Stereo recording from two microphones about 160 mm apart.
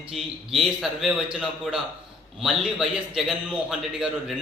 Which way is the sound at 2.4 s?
Centre (ahead or behind).